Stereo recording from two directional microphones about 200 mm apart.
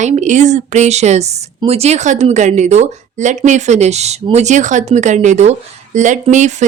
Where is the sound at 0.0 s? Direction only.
35° right (ahead or behind).